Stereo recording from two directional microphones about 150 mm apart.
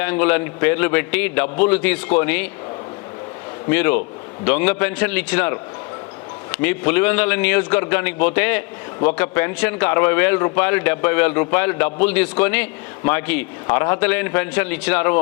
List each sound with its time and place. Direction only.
0.0 s speech: 10° left (ahead or behind)
3.7 s speech: 10° left (ahead or behind)